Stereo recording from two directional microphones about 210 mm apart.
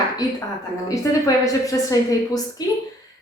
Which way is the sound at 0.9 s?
15° left (ahead or behind).